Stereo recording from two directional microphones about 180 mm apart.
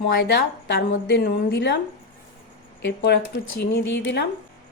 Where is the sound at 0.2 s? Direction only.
65° left (ahead or behind).